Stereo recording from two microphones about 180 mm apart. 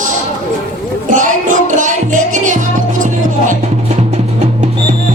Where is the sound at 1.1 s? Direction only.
45° right (ahead or behind).